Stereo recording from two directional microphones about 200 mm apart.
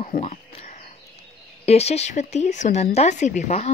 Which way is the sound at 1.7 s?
30° left (ahead or behind).